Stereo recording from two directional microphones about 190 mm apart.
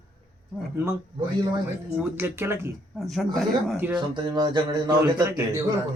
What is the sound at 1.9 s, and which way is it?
Speech, 10° right (ahead or behind).